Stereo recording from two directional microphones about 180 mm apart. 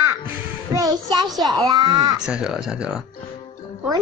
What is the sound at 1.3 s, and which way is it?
Speech, centre (ahead or behind).